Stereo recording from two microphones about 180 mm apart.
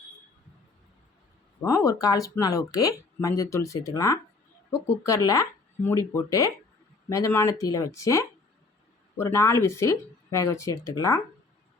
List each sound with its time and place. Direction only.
1.6 s speech: 15° left (ahead or behind)
7.1 s speech: 15° left (ahead or behind)